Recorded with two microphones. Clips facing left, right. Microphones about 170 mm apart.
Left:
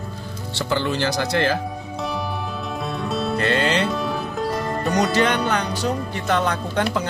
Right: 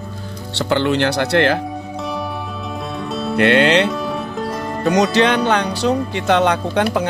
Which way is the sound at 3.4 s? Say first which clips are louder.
Right 9 dB; 65° right (ahead or behind).